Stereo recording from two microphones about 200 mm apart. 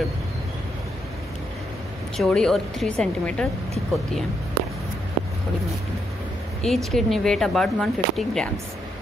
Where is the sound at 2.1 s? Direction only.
Centre (ahead or behind).